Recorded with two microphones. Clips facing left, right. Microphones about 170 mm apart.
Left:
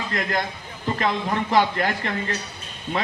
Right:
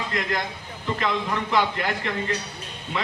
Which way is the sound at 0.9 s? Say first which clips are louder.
Left 2 dB; 40° left (ahead or behind).